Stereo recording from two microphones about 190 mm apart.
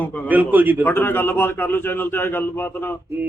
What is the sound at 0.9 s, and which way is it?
A man's voice, 10° left (ahead or behind).